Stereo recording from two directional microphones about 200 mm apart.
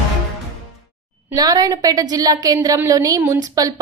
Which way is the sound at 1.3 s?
20° right (ahead or behind).